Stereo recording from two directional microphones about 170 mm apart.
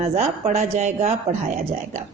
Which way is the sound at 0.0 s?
40° right (ahead or behind).